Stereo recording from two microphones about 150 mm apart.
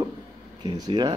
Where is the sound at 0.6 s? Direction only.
30° right (ahead or behind).